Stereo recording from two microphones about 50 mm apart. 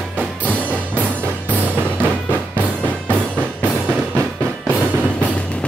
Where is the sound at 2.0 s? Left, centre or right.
Right.